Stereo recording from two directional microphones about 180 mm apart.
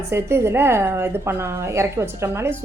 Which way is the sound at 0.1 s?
15° right (ahead or behind).